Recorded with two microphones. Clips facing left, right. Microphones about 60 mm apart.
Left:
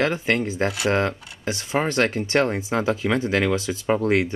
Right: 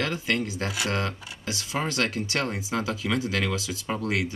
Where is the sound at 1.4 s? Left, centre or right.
Left.